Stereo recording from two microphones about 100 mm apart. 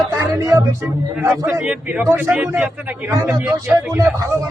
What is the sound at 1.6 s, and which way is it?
Speech, 10° right (ahead or behind).